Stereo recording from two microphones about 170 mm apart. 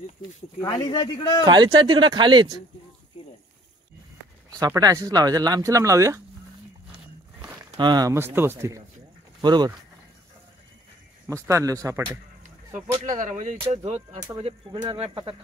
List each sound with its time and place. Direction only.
0.7 s speech: 25° left (ahead or behind)
1.4 s speech: 25° right (ahead or behind)
4.5 s speech: 20° right (ahead or behind)
7.7 s speech: 25° right (ahead or behind)
11.2 s speech: 15° right (ahead or behind)
13.0 s speech: 45° right (ahead or behind)
14.1 s speech: 20° right (ahead or behind)
14.4 s speech: 30° right (ahead or behind)